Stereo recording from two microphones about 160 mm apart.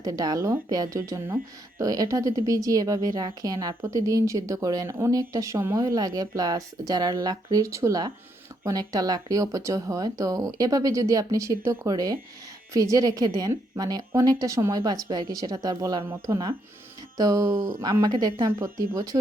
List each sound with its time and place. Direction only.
0.0 s speech: 25° right (ahead or behind)
18.6 s speech: 20° right (ahead or behind)